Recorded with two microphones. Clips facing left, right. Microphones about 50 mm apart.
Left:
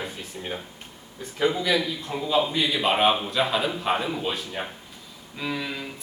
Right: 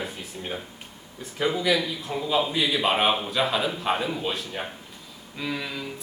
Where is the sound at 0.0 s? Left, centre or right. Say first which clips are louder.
Even; centre.